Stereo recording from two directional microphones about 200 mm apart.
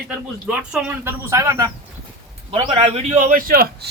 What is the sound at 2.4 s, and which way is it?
A man's voice, 25° right (ahead or behind).